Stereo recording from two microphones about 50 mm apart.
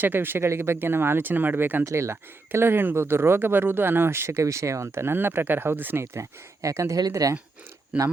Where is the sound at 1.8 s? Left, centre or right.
Right.